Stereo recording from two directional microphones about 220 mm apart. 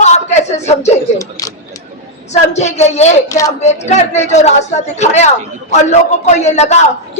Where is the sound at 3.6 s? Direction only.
30° left (ahead or behind).